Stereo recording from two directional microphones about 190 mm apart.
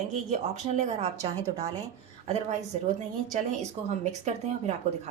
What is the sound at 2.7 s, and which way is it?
Speech, 40° right (ahead or behind).